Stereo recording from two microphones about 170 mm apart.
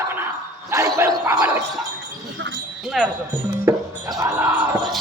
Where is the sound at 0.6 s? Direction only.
20° right (ahead or behind).